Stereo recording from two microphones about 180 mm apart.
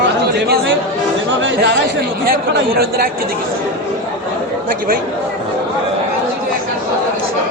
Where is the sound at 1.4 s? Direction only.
85° right.